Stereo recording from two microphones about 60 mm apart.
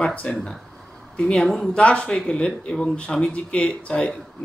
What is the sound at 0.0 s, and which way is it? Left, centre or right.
A woman's voice, left.